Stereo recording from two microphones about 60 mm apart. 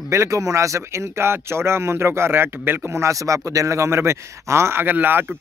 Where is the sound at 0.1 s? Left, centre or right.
Right.